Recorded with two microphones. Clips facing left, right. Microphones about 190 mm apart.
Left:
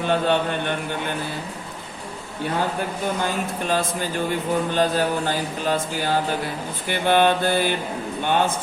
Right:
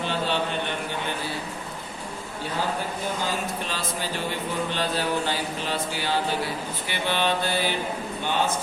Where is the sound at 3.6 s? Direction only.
50° left (ahead or behind).